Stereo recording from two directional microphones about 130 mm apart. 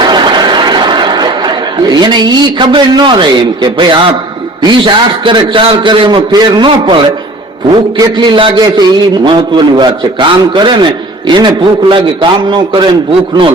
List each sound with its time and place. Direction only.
0.0 s chatter: 35° right (ahead or behind)
4.6 s a man's voice: 35° right (ahead or behind)